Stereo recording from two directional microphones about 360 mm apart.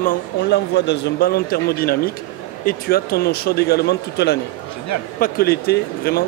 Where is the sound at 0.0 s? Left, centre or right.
Left.